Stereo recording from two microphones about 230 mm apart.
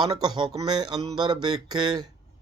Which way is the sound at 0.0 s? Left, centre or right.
Centre.